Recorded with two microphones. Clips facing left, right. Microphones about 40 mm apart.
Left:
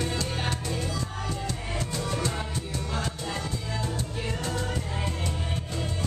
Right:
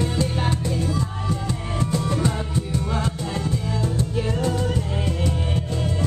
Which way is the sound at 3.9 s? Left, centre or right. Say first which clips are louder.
Right 8 dB; centre.